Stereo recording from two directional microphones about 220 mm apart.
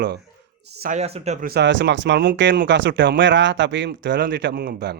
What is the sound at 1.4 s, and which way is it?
Speech, 50° right (ahead or behind).